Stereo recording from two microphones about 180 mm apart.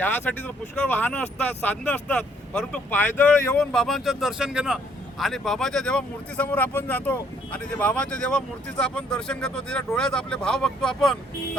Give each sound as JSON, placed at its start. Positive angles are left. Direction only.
{"t": 0.0, "sound": "speech", "side_deg": 10}